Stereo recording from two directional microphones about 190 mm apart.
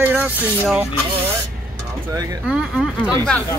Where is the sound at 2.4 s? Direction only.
Centre (ahead or behind).